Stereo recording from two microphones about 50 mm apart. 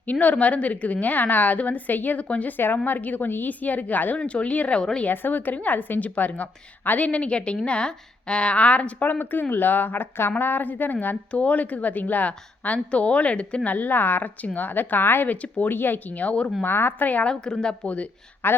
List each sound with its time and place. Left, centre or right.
0.0 s a woman's voice: left
4.2 s a woman's voice: left
4.8 s a woman's voice: centre
5.0 s a woman's voice: left
11.3 s a woman's voice: left
13.7 s a woman's voice: left
15.3 s a woman's voice: left
15.7 s a woman's voice: left
16.6 s speech: left
17.2 s a woman's voice: centre
17.8 s a woman's voice: left
18.4 s speech: left